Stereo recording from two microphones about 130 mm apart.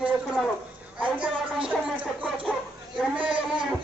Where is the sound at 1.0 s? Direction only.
10° right (ahead or behind).